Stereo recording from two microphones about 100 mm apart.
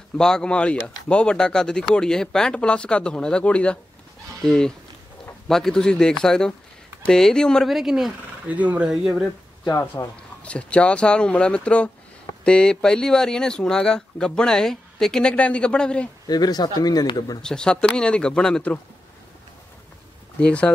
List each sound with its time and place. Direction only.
0.2 s speech: 5° left (ahead or behind)
8.5 s speech: 15° right (ahead or behind)
9.7 s speech: 30° left (ahead or behind)
10.4 s speech: 10° left (ahead or behind)
16.3 s speech: 45° left (ahead or behind)
17.4 s speech: 5° left (ahead or behind)
20.3 s speech: 10° left (ahead or behind)